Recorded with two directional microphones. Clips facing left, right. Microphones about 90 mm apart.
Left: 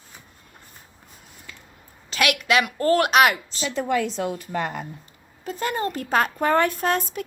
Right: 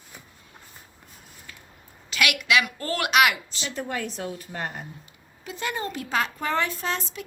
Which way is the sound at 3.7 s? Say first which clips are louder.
Left 8 dB; 90° left.